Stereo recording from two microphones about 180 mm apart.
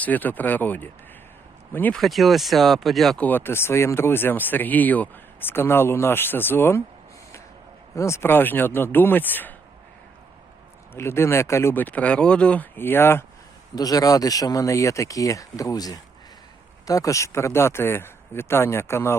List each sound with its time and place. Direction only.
0.0 s speech: 10° left (ahead or behind)
7.9 s speech: 15° left (ahead or behind)
10.9 s speech: 15° left (ahead or behind)